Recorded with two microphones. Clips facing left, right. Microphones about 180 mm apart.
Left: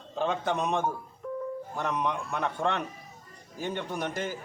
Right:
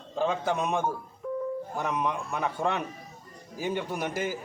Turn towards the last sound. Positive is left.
turn(degrees=-5)  # may be behind; listen again after turning